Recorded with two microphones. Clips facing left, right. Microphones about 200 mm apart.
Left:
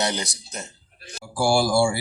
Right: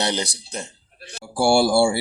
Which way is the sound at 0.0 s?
30° right (ahead or behind).